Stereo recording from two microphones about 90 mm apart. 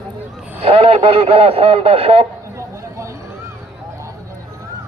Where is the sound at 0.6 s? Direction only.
90° right.